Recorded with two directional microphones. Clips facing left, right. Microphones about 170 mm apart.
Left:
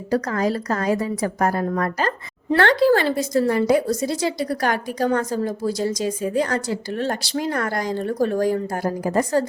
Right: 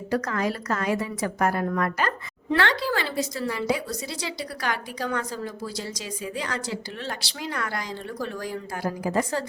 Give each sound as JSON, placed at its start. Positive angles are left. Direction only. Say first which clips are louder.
{"t": 0.1, "sound": "a woman's voice", "louder": "left 5 dB", "side_deg": 35}